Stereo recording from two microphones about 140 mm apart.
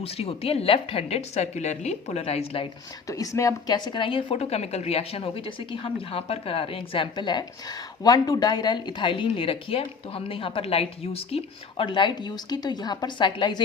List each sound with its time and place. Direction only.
0.0 s a woman's voice: 45° left (ahead or behind)
3.1 s a woman's voice: 25° left (ahead or behind)